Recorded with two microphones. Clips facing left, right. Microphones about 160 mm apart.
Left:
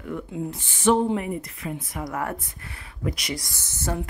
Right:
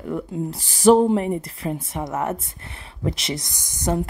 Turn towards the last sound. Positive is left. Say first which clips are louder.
# right 6 dB
turn(degrees=-15)  # may be behind; listen again after turning